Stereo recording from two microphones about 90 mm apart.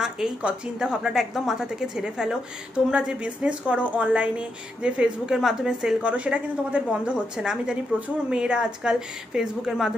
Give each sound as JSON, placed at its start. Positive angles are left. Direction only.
{"t": 0.0, "sound": "speech", "side_deg": -10}